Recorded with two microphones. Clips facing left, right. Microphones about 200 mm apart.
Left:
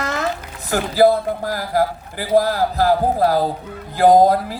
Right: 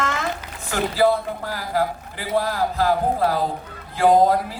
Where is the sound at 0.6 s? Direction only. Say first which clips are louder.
Left 4 dB; 40° left (ahead or behind).